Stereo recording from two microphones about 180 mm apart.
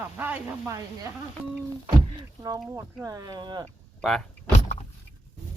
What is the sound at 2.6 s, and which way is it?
Speech, 15° right (ahead or behind).